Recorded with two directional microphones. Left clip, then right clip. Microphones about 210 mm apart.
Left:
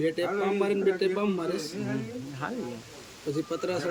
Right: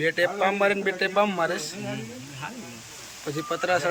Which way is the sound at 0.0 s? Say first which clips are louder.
Right 5 dB; 5° left (ahead or behind).